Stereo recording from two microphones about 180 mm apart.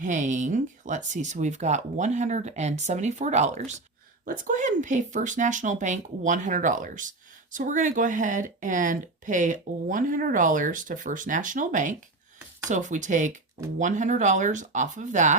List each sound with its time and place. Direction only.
0.0 s speech: 45° right (ahead or behind)